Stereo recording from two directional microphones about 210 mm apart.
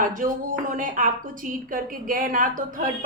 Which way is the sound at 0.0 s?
40° right (ahead or behind).